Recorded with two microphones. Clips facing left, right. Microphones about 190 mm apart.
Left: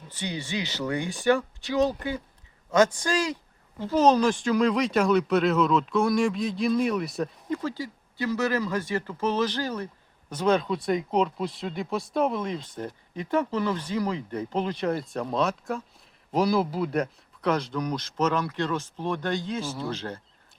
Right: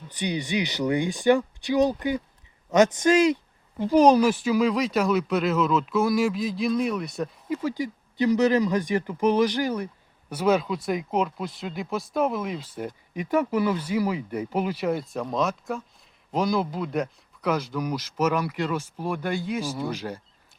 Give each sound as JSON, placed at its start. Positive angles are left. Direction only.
{"t": 0.1, "sound": "a man's voice", "side_deg": -15}
{"t": 7.6, "sound": "speech", "side_deg": -15}